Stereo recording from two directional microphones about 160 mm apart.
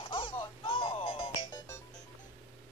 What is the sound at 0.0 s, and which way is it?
Music, 35° left (ahead or behind).